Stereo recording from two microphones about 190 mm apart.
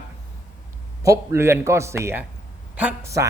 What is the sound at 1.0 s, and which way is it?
Speech, 15° right (ahead or behind).